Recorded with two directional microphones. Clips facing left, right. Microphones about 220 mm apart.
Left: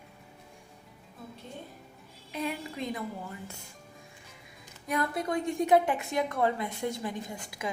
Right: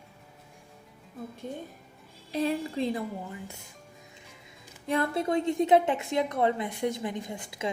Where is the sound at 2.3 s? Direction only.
30° right (ahead or behind).